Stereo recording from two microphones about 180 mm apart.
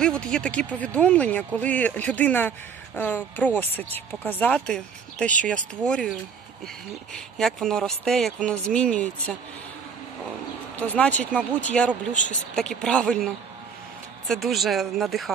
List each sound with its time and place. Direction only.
0.0 s speech: 5° left (ahead or behind)
7.3 s speech: centre (ahead or behind)
10.8 s speech: 10° left (ahead or behind)
12.1 s speech: 45° left (ahead or behind)
12.5 s speech: 5° left (ahead or behind)